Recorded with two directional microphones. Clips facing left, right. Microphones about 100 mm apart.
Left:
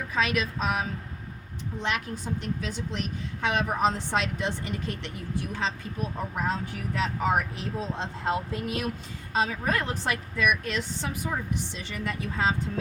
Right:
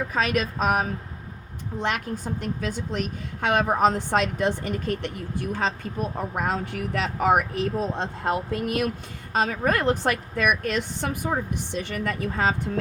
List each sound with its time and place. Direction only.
0.1 s a woman's voice: 45° right (ahead or behind)